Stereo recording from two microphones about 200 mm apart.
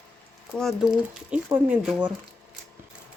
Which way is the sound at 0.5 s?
Centre (ahead or behind).